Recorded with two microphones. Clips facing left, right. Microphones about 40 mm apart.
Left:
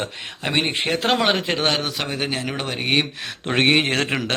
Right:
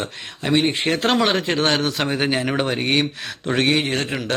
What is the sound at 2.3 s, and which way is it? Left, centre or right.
Speech, centre.